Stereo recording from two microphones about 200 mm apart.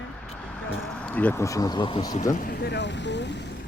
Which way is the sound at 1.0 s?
10° left (ahead or behind).